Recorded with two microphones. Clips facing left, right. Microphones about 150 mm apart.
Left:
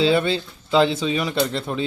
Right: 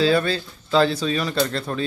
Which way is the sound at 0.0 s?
20° left (ahead or behind).